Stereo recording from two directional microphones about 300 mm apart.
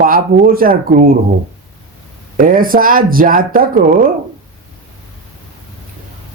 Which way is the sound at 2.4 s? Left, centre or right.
Right.